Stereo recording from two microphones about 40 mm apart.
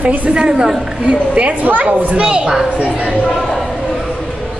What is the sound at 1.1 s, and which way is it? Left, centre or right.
Speech, right.